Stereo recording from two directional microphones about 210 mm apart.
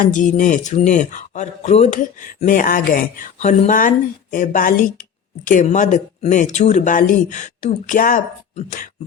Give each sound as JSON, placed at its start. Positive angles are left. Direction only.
{"t": 0.0, "sound": "speech", "side_deg": 35}